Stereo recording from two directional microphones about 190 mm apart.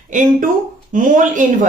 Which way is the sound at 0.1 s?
45° right (ahead or behind).